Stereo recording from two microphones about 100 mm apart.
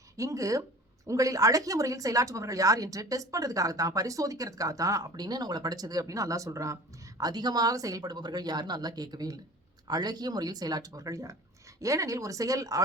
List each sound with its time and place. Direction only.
0.2 s speech: 35° right (ahead or behind)
7.2 s speech: 45° right (ahead or behind)